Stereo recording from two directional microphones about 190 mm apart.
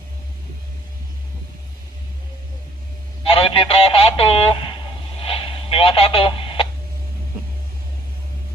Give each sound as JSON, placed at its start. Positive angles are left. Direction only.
{"t": 3.3, "sound": "speech", "side_deg": 30}
{"t": 5.2, "sound": "radio", "side_deg": 30}